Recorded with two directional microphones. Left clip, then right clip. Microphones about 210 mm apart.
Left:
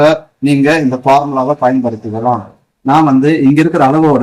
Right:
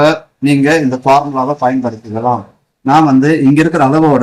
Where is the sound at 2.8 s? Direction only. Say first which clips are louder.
Even; 15° right (ahead or behind).